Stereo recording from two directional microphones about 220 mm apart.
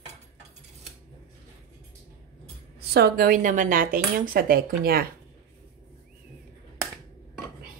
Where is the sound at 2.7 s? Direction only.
45° right (ahead or behind).